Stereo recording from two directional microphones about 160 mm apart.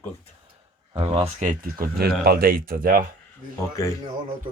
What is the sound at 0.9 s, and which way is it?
Speech, 30° right (ahead or behind).